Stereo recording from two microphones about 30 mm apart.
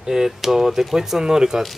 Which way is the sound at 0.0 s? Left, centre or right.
Centre.